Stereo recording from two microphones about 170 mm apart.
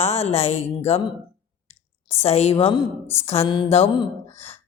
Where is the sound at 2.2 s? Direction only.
40° left (ahead or behind).